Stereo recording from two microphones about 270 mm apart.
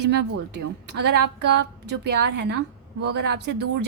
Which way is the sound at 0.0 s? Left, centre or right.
Right.